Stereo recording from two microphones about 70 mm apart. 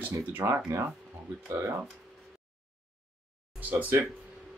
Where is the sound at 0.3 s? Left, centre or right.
Right.